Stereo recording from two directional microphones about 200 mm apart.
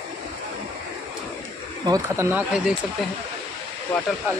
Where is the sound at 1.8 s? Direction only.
15° right (ahead or behind).